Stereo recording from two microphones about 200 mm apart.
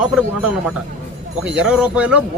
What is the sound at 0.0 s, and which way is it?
A man's voice, 5° right (ahead or behind).